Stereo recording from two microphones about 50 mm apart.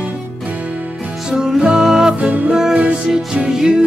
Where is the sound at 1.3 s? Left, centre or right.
Centre.